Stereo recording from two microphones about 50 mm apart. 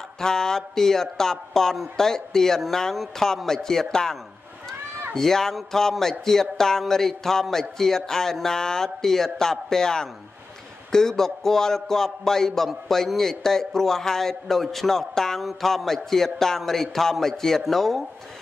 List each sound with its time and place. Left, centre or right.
0.2 s a man's voice: centre